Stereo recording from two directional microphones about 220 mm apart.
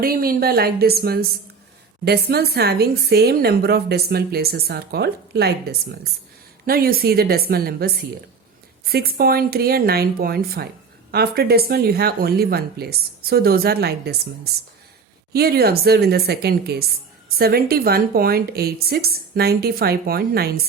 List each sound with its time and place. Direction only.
0.0 s a woman's voice: 40° right (ahead or behind)